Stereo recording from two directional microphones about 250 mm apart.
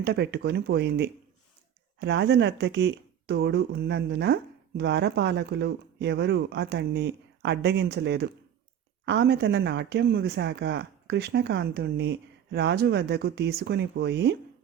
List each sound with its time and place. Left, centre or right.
0.0 s speech: right